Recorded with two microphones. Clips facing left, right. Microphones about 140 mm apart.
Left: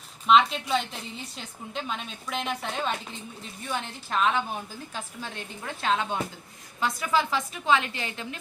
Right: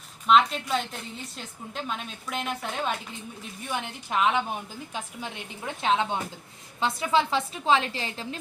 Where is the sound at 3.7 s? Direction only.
15° right (ahead or behind).